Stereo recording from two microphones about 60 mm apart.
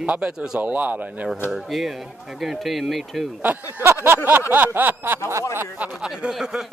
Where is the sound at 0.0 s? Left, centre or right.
Centre.